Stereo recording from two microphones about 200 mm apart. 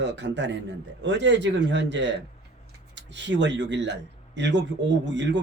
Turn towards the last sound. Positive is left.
turn(degrees=-60)  # may be behind; listen again after turning